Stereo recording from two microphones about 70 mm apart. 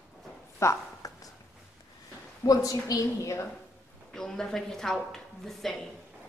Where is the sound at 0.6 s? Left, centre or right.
Left.